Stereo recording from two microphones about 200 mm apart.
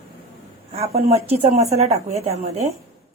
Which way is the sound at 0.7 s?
30° right (ahead or behind).